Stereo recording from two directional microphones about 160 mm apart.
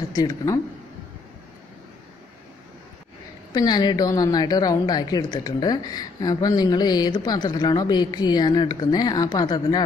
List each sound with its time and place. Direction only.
0.1 s a woman's voice: 25° left (ahead or behind)
3.5 s a woman's voice: 25° left (ahead or behind)